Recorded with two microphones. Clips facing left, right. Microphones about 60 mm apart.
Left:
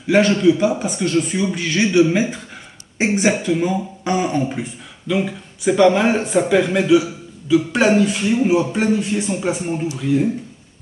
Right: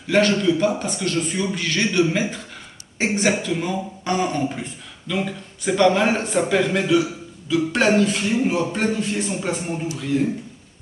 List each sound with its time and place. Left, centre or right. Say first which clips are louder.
0.1 s speech: left 4 dB; centre